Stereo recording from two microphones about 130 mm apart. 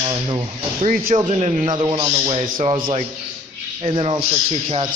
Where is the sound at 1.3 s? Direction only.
50° right (ahead or behind).